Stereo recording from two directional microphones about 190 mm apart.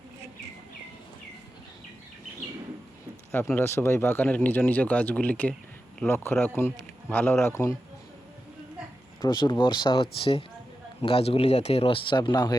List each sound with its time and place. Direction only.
3.3 s speech: 10° left (ahead or behind)
9.2 s speech: 25° left (ahead or behind)